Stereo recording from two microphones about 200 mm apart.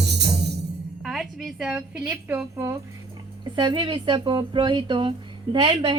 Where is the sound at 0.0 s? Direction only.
55° right (ahead or behind).